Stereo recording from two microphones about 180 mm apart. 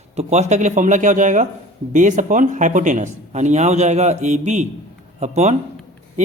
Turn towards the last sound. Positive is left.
turn(degrees=-40)  # may be behind; listen again after turning